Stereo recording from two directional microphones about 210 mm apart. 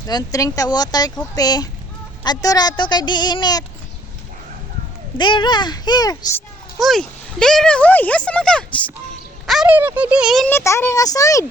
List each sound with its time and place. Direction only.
0.1 s speech: 15° left (ahead or behind)
5.1 s speech: 20° left (ahead or behind)
6.7 s speech: centre (ahead or behind)
10.5 s speech: 15° left (ahead or behind)